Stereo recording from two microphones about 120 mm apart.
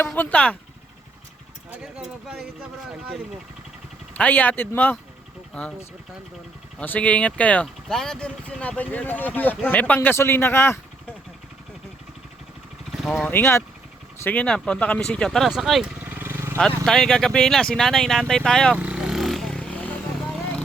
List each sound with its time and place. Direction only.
0.2 s speech: 10° left (ahead or behind)
1.7 s speech: 5° right (ahead or behind)
4.2 s speech: 15° left (ahead or behind)
6.7 s speech: 15° left (ahead or behind)
13.0 s speech: centre (ahead or behind)
13.2 s speech: 20° left (ahead or behind)
14.3 s speech: 10° left (ahead or behind)
16.0 s vehicle: 15° right (ahead or behind)
16.6 s speech: 5° left (ahead or behind)
18.8 s vehicle: 10° right (ahead or behind); by 19.9 s 5° left (ahead or behind)